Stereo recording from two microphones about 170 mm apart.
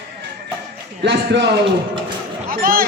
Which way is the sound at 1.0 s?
90° right.